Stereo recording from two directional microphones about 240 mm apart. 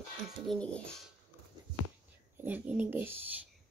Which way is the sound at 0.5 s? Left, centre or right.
Centre.